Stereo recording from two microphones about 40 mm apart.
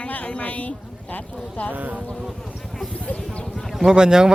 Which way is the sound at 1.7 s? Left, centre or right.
Right.